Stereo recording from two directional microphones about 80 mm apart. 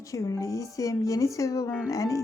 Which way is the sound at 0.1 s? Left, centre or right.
Left.